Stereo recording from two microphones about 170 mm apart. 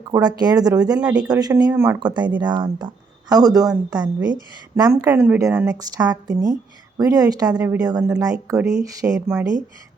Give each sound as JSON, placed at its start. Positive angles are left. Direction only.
{"t": 0.1, "sound": "a woman's voice", "side_deg": -25}